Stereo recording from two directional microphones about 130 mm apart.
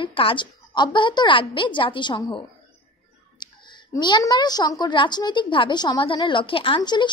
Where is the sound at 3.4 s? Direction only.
35° left (ahead or behind).